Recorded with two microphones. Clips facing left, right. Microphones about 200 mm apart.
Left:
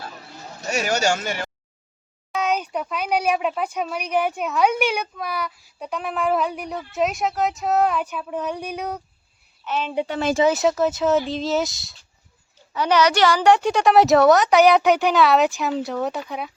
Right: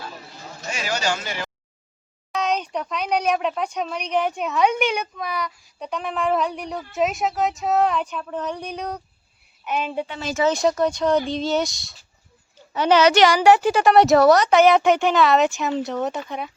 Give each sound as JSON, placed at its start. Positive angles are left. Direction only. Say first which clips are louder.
{"t": 0.7, "sound": "speech", "louder": "left 4 dB", "side_deg": 45}
{"t": 2.3, "sound": "speech", "louder": "even", "side_deg": 5}
{"t": 9.6, "sound": "a woman's voice", "louder": "even", "side_deg": -10}
{"t": 10.1, "sound": "speech", "louder": "left 7 dB", "side_deg": 55}
{"t": 10.4, "sound": "speech", "louder": "right 1 dB", "side_deg": 5}
{"t": 12.7, "sound": "speech", "louder": "right 3 dB", "side_deg": -25}